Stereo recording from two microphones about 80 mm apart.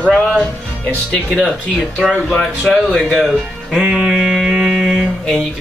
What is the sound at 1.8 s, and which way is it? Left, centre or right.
Speech, centre.